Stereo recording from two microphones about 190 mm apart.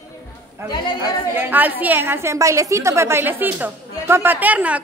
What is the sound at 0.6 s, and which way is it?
Speech, 25° left (ahead or behind).